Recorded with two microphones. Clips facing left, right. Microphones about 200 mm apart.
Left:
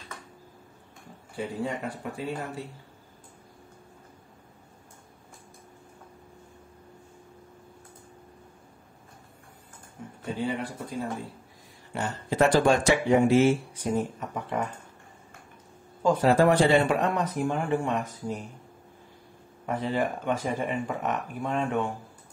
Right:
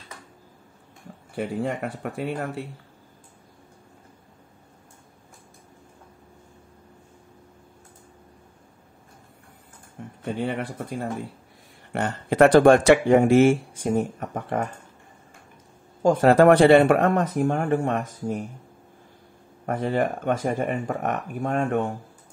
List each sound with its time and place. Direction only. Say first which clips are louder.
1.3 s speech: right 4 dB; 65° right (ahead or behind)
10.2 s speech: right 3 dB; 65° right (ahead or behind)
16.0 s speech: right 5 dB; 55° right (ahead or behind)
19.6 s speech: right 4 dB; 50° right (ahead or behind)